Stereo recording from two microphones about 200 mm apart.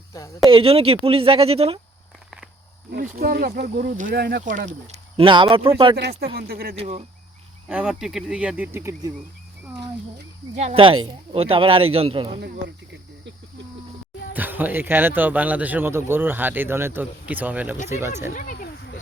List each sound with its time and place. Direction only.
0.4 s speech: 30° right (ahead or behind)
2.9 s speech: 45° right (ahead or behind)
5.1 s speech: 25° right (ahead or behind)
6.0 s speech: 55° right (ahead or behind)
6.7 s speech: 30° right (ahead or behind)
7.7 s speech: 5° right (ahead or behind)
10.5 s speech: 35° right (ahead or behind)
14.3 s speech: 10° right (ahead or behind)
18.3 s a sound: 45° left (ahead or behind)